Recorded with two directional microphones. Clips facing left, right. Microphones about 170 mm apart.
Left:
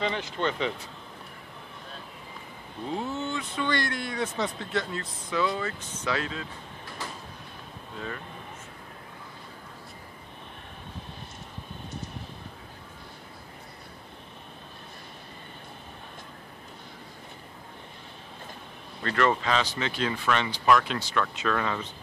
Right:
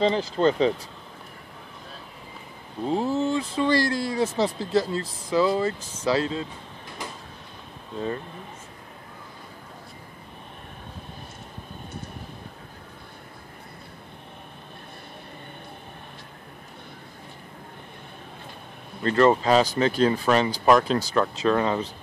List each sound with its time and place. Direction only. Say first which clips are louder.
0.0 s speech: right 8 dB; 35° right (ahead or behind)
2.9 s speech: right 8 dB; 35° right (ahead or behind)
19.0 s speech: right 7 dB; 30° right (ahead or behind)